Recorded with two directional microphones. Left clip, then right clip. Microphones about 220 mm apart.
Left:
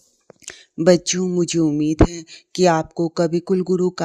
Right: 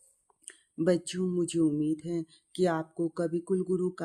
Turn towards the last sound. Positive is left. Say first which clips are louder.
# left 10 dB
turn(degrees=30)  # may be behind; listen again after turning